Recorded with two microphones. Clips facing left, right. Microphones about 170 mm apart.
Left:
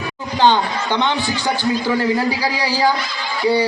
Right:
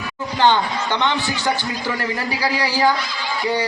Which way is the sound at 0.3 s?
15° left (ahead or behind).